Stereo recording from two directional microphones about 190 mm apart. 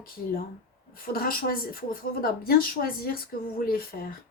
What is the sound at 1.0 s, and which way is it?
A woman's voice, 50° left (ahead or behind).